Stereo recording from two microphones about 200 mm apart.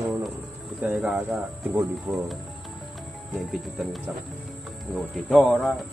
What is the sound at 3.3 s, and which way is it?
Speech, centre (ahead or behind).